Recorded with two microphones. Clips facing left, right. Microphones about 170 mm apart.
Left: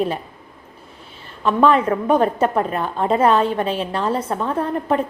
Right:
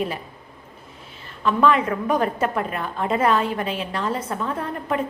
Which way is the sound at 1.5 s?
35° left (ahead or behind).